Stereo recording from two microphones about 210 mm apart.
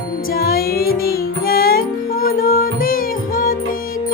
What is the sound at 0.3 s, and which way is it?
Music, 45° left (ahead or behind).